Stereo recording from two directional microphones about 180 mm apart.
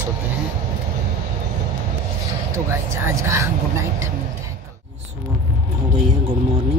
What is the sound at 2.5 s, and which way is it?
Speech, 15° right (ahead or behind).